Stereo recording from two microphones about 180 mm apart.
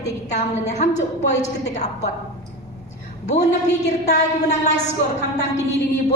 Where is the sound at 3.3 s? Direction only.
40° left (ahead or behind).